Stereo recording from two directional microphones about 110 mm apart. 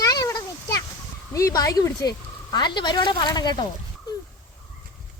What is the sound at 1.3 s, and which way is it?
Speech, 30° left (ahead or behind).